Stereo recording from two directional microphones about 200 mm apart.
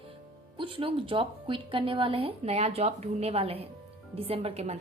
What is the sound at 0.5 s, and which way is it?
Speech, 25° right (ahead or behind).